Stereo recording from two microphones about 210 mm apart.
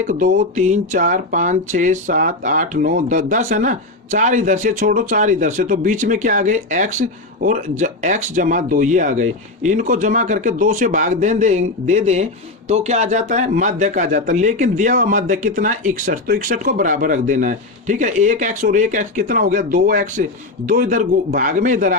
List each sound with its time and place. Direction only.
0.1 s speech: 35° right (ahead or behind)